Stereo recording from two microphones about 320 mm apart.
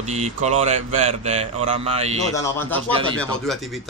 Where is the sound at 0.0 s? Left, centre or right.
Right.